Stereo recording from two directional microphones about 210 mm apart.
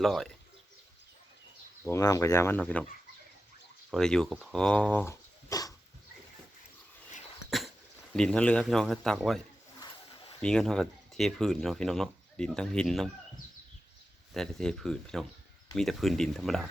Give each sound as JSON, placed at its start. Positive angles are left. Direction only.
{"t": 0.0, "sound": "speech", "side_deg": 0}
{"t": 1.8, "sound": "speech", "side_deg": 15}
{"t": 3.9, "sound": "speech", "side_deg": 5}
{"t": 7.5, "sound": "a sound", "side_deg": 0}
{"t": 8.1, "sound": "speech", "side_deg": 5}
{"t": 9.8, "sound": "a sound", "side_deg": 20}
{"t": 10.4, "sound": "speech", "side_deg": 5}
{"t": 14.3, "sound": "speech", "side_deg": 5}